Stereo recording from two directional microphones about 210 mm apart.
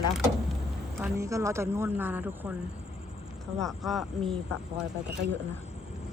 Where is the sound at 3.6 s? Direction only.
Centre (ahead or behind).